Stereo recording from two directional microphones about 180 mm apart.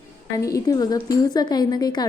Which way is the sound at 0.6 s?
20° left (ahead or behind).